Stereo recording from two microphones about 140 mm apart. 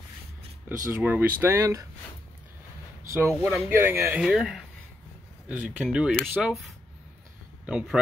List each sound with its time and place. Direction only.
0.7 s speech: 10° right (ahead or behind)
3.1 s speech: 15° right (ahead or behind)
4.2 s speech: 5° right (ahead or behind)
5.7 s speech: centre (ahead or behind)
6.4 s speech: 5° left (ahead or behind)
7.6 s speech: 5° right (ahead or behind)